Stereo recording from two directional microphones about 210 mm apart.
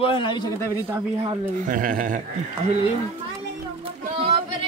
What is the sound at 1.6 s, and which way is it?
Speech, 40° right (ahead or behind).